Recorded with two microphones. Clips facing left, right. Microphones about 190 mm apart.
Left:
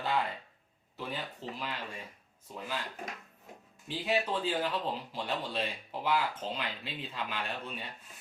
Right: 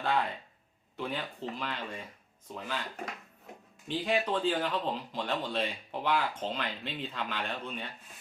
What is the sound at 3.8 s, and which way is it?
Speech, 10° left (ahead or behind).